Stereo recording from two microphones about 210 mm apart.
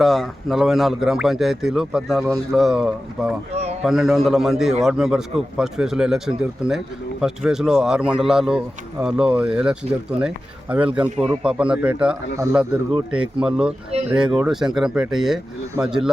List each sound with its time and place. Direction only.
0.0 s a man's voice: centre (ahead or behind)
3.5 s a sound: 30° right (ahead or behind)
3.8 s a man's voice: centre (ahead or behind)